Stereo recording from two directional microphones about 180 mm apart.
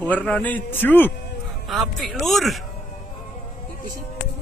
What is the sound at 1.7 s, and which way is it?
Speech, centre (ahead or behind).